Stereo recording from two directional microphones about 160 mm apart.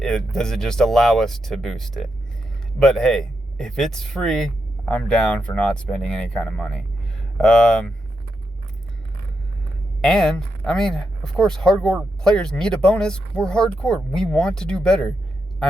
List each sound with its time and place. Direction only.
0.0 s speech: 5° left (ahead or behind)
10.0 s speech: 5° left (ahead or behind)